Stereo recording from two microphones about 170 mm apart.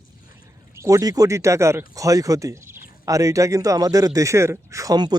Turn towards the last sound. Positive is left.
turn(degrees=-25)  # may be behind; listen again after turning